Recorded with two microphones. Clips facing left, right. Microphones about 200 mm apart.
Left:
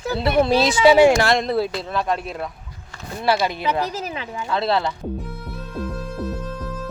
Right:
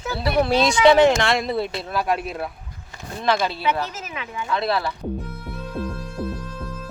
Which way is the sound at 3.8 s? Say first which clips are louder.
Left 4 dB; 35° left (ahead or behind).